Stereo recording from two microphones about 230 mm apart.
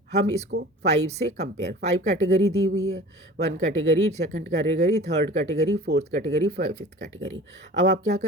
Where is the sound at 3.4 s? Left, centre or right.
Right.